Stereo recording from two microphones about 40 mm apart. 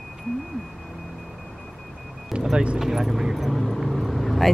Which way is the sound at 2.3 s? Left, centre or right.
Centre.